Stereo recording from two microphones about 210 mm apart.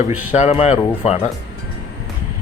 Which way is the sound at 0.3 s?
30° left (ahead or behind).